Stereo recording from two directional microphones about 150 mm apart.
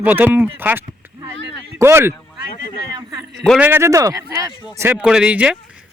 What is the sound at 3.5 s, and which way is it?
Speech, 10° right (ahead or behind).